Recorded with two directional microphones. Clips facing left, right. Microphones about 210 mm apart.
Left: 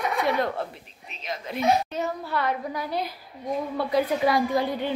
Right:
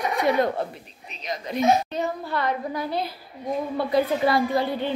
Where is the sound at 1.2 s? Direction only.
5° left (ahead or behind).